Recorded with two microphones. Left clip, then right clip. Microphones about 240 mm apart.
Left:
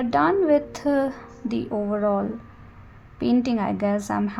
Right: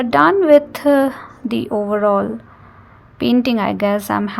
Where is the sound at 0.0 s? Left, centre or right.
Right.